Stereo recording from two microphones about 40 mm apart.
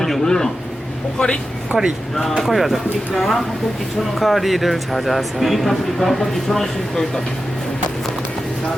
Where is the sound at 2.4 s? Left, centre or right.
Centre.